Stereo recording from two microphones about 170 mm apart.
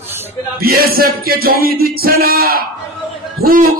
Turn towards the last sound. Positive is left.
turn(degrees=-60)  # may be behind; listen again after turning